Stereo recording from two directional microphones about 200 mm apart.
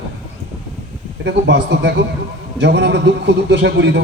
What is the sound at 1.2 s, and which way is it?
A man's voice, 60° right (ahead or behind).